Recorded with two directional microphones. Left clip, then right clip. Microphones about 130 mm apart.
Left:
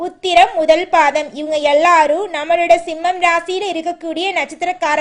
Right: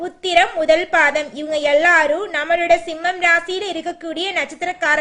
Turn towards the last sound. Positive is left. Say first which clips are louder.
# left 1 dB
turn(degrees=20)  # may be behind; listen again after turning